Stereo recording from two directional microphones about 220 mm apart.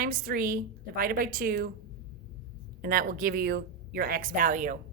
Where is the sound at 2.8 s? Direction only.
40° right (ahead or behind).